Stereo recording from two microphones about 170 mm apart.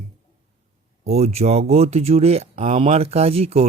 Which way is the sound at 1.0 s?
40° right (ahead or behind).